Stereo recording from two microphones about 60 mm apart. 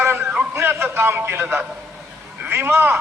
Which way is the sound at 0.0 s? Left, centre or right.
Right.